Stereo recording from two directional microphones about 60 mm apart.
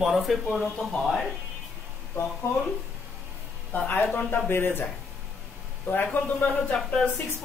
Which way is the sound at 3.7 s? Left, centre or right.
Left.